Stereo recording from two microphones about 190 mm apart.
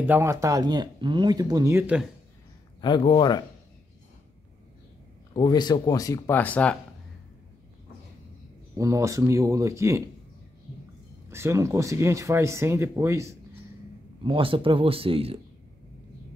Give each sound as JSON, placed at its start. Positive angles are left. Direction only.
{"t": 0.0, "sound": "speech", "side_deg": -10}
{"t": 2.8, "sound": "a man's voice", "side_deg": 25}
{"t": 5.3, "sound": "speech", "side_deg": 20}
{"t": 8.7, "sound": "speech", "side_deg": -15}
{"t": 11.2, "sound": "speech", "side_deg": -15}
{"t": 14.2, "sound": "speech", "side_deg": -25}